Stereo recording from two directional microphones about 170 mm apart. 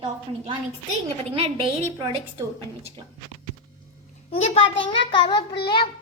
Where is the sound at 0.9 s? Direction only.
35° right (ahead or behind).